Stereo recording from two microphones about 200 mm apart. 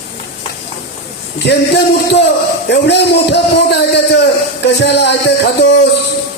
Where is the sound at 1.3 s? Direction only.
60° left (ahead or behind).